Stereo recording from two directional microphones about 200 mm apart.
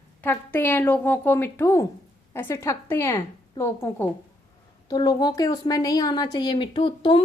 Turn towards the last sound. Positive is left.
turn(degrees=25)  # may be behind; listen again after turning